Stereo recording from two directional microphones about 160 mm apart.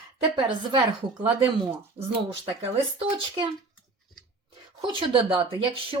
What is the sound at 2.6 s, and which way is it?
Speech, 35° right (ahead or behind).